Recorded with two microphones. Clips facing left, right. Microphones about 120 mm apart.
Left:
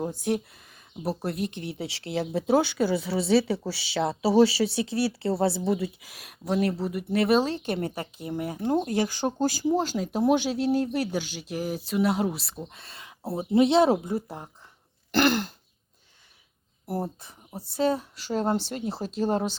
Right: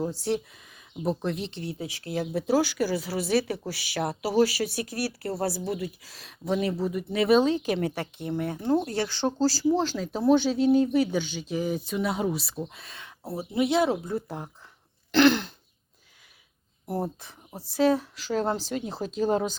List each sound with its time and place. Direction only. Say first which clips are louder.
1.0 s speech: right 2 dB; 5° left (ahead or behind)
1.4 s speech: left 3 dB; 55° left (ahead or behind)
1.8 s speech: left 2 dB; 25° left (ahead or behind)
6.1 s speech: right 4 dB; 10° left (ahead or behind)
13.2 s speech: left 5 dB; 25° left (ahead or behind)
14.1 s speech: left 1 dB; 5° left (ahead or behind)
15.1 s throat clearing: right 3 dB; 5° left (ahead or behind)
16.8 s speech: right 1 dB; centre (ahead or behind)
19.1 s speech: right 1 dB; centre (ahead or behind)